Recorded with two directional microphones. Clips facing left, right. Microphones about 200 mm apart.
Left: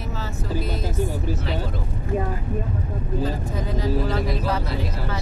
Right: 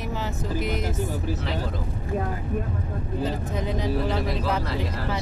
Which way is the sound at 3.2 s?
20° right (ahead or behind).